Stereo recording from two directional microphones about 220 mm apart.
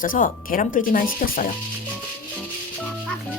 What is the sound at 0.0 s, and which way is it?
Speech, 40° left (ahead or behind).